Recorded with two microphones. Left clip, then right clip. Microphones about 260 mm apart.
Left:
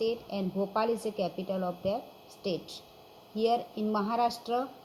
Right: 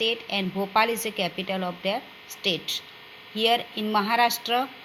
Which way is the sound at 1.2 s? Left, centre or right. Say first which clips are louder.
Right 5 dB; right.